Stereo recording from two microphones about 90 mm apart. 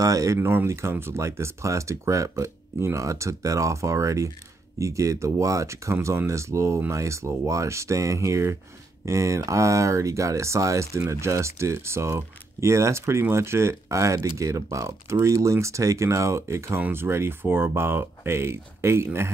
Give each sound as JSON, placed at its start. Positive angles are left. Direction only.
{"t": 0.0, "sound": "speech", "side_deg": -40}
{"t": 0.5, "sound": "speech", "side_deg": -25}